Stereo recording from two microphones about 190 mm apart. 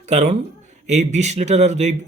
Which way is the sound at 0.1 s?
35° right (ahead or behind).